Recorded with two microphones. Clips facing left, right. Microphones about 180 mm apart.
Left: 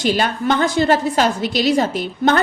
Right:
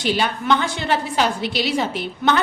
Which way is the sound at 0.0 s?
45° left (ahead or behind).